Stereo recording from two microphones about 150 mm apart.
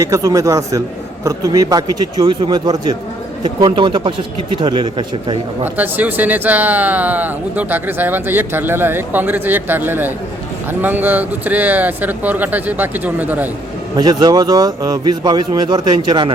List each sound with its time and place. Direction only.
0.0 s a man's voice: 20° right (ahead or behind)
5.6 s speech: 10° right (ahead or behind)
13.9 s a man's voice: 25° right (ahead or behind)